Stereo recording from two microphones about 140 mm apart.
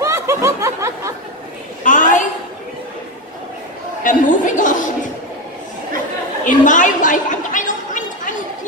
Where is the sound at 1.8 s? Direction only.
65° left (ahead or behind).